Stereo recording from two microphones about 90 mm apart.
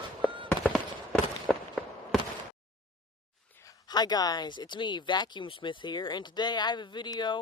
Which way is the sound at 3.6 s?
50° left (ahead or behind).